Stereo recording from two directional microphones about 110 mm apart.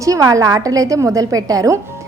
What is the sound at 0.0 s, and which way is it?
A woman's voice, 30° right (ahead or behind).